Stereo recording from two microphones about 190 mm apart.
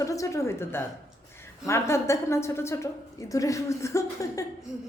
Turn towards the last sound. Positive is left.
turn(degrees=15)  # may be behind; listen again after turning